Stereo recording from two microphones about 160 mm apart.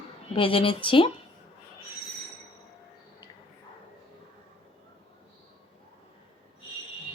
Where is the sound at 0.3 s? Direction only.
35° left (ahead or behind).